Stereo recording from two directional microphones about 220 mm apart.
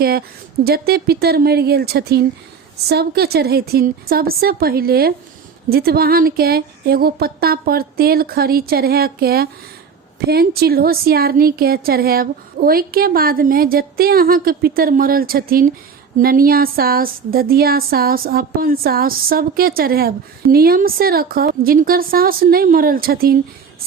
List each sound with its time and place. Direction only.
0.0 s a woman's voice: 45° right (ahead or behind)